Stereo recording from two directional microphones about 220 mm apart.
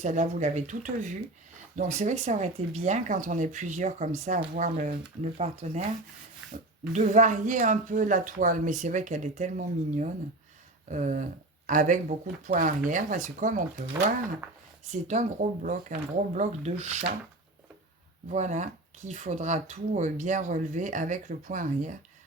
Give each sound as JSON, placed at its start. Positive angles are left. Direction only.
{"t": 0.0, "sound": "speech", "side_deg": -35}
{"t": 6.9, "sound": "speech", "side_deg": -35}
{"t": 15.0, "sound": "speech", "side_deg": -35}
{"t": 18.3, "sound": "speech", "side_deg": -30}